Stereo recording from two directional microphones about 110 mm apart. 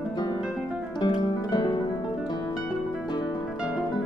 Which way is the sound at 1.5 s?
40° left (ahead or behind).